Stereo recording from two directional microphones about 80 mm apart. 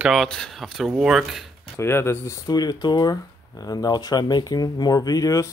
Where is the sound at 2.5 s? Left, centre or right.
Left.